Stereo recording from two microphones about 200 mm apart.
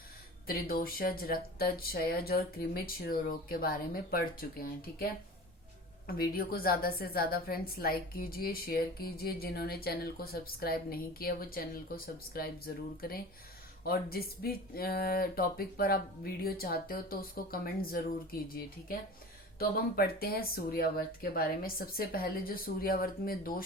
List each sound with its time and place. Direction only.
0.4 s speech: 45° left (ahead or behind)
6.1 s speech: 50° left (ahead or behind)